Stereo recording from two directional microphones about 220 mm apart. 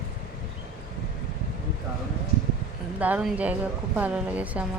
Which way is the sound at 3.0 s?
5° right (ahead or behind).